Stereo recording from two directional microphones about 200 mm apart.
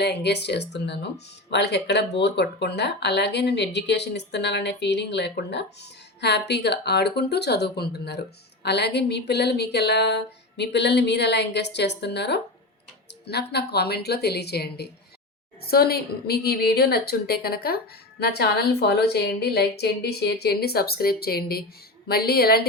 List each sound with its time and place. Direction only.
0.0 s a woman's voice: 55° left (ahead or behind)